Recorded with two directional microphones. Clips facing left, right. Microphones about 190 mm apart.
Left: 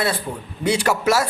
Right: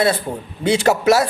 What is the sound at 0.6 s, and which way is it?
Speech, 20° right (ahead or behind).